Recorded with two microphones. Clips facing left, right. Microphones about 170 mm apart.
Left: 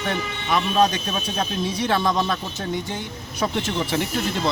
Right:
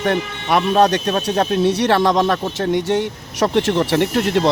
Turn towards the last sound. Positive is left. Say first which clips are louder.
# right 8 dB
turn(degrees=-70)  # may be behind; listen again after turning